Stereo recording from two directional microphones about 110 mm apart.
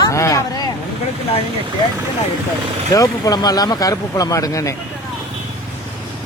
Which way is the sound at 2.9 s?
35° left (ahead or behind).